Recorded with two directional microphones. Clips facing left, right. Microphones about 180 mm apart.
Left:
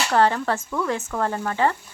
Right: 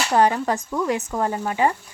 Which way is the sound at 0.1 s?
15° right (ahead or behind).